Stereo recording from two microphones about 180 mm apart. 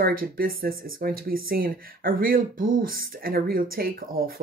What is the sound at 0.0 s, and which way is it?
Speech, 55° right (ahead or behind).